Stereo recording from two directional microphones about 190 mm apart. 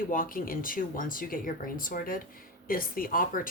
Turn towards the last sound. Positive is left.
turn(degrees=45)  # may be behind; listen again after turning